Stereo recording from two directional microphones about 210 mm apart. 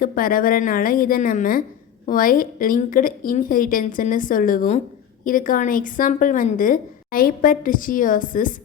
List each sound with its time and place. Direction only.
0.0 s a woman's voice: 40° left (ahead or behind)